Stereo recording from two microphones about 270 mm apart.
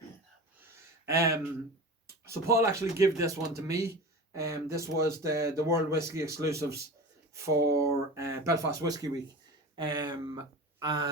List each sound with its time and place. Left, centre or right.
1.0 s speech: centre